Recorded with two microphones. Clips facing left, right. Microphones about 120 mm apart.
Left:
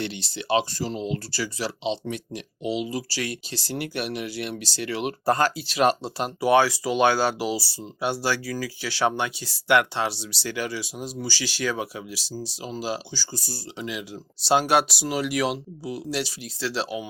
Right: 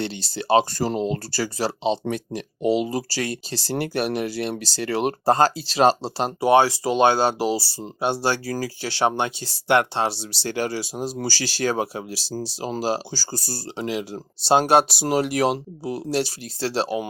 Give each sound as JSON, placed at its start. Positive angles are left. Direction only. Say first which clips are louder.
{"t": 0.0, "sound": "speech", "louder": "right 3 dB", "side_deg": -35}
{"t": 0.7, "sound": "speech", "louder": "right 5 dB", "side_deg": -50}
{"t": 15.0, "sound": "speech", "louder": "right 4 dB", "side_deg": -40}
{"t": 15.5, "sound": "speech", "louder": "right 4 dB", "side_deg": -55}
{"t": 16.6, "sound": "speech", "louder": "right 4 dB", "side_deg": -35}